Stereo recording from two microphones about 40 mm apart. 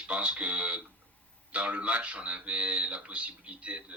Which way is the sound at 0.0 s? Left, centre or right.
Right.